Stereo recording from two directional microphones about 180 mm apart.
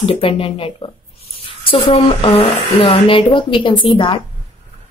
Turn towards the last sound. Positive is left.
turn(degrees=25)  # may be behind; listen again after turning